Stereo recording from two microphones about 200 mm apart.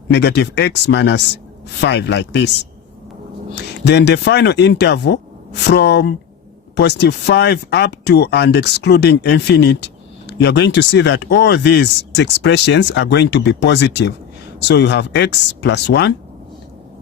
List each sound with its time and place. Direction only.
0.1 s speech: 55° left (ahead or behind)
3.5 s speech: 55° left (ahead or behind)